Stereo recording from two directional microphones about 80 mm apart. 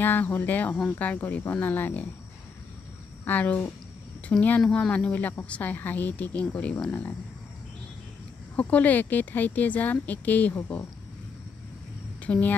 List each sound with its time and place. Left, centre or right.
0.0 s speech: left
3.3 s speech: centre
4.6 s speech: centre
8.5 s speech: centre
12.2 s a woman's voice: centre